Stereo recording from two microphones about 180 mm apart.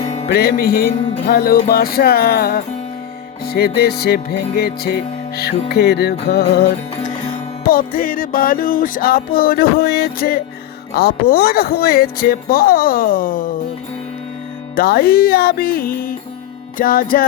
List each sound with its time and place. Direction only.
0.0 s music: 35° left (ahead or behind)
0.3 s music: 60° left (ahead or behind)
14.8 s music: 55° left (ahead or behind)